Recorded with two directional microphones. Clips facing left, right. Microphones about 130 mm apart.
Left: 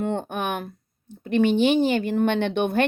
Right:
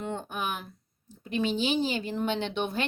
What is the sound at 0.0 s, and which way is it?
Speech, 60° left (ahead or behind).